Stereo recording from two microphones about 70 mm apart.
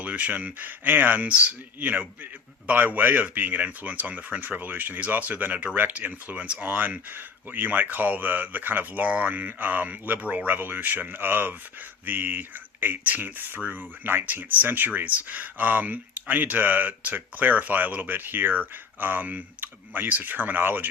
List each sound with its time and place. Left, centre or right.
0.0 s speech: centre